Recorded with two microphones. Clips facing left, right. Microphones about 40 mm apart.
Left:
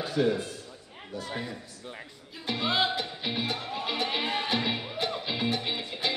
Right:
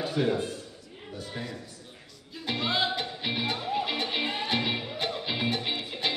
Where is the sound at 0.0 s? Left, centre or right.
Centre.